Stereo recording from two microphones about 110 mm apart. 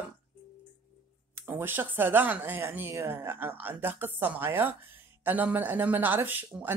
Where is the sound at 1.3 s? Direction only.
20° right (ahead or behind).